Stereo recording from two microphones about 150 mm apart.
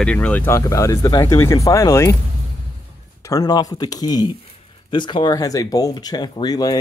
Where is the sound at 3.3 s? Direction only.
25° left (ahead or behind).